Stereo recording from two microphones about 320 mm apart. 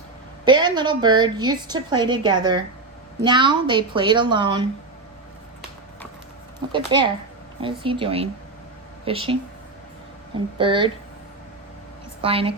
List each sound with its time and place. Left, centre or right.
0.4 s a woman's voice: centre
6.7 s a woman's voice: centre
10.6 s a woman's voice: centre
12.2 s a woman's voice: centre